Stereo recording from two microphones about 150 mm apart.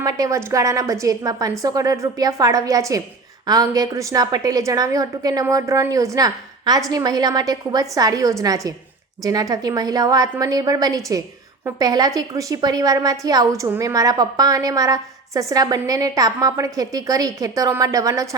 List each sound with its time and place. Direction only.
0.0 s a woman's voice: 20° right (ahead or behind)